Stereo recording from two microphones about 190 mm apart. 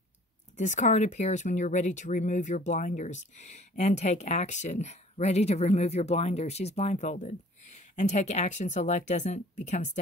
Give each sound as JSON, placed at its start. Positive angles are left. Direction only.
{"t": 0.6, "sound": "speech", "side_deg": 40}